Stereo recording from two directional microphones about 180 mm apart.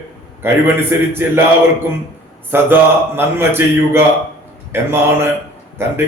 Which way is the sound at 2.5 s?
10° right (ahead or behind).